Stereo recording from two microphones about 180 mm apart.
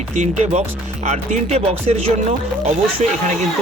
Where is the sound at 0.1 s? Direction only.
40° right (ahead or behind).